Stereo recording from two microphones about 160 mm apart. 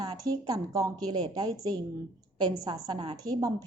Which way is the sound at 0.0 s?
25° right (ahead or behind).